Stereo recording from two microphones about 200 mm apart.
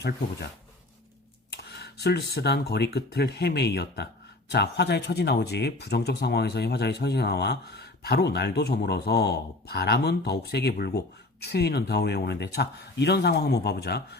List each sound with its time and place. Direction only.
1.5 s speech: 55° left (ahead or behind)